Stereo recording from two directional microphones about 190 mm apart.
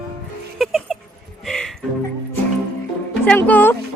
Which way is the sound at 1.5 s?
Centre (ahead or behind).